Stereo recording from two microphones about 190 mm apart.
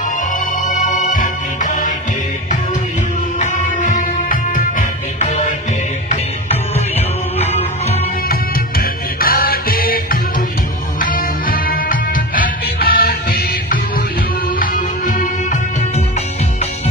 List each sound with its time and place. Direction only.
0.7 s music: 40° left (ahead or behind)
3.3 s music: 40° left (ahead or behind)
8.3 s music: 50° left (ahead or behind)